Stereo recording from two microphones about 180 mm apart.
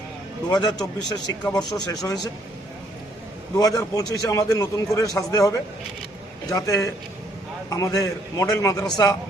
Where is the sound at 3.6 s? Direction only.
20° left (ahead or behind).